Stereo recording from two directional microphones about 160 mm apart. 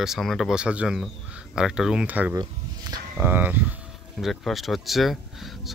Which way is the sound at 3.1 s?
10° right (ahead or behind).